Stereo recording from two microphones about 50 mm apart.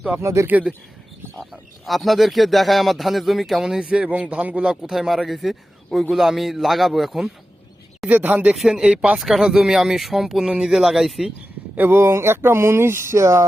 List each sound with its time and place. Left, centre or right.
0.2 s speech: right
1.8 s speech: centre
3.8 s speech: right; by 7.3 s centre
8.1 s speech: right
8.5 s speech: centre
11.8 s speech: right
12.0 s speech: right